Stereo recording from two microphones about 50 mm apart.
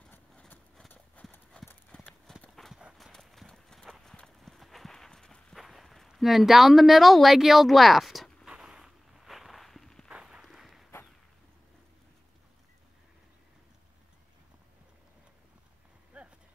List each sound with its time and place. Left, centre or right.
1.2 s clip-clop: left
2.3 s clip-clop: centre
2.7 s run: centre
3.1 s clip-clop: centre
5.6 s walk: centre
6.1 s speech: centre
8.5 s walk: centre
10.4 s a sound: centre
16.1 s clip-clop: right